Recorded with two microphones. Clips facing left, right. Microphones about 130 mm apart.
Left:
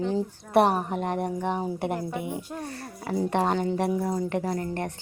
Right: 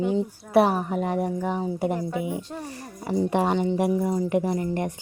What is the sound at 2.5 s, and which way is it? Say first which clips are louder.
Speech: even; 10° right (ahead or behind).